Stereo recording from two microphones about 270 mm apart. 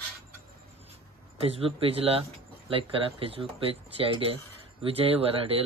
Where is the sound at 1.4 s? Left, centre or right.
Right.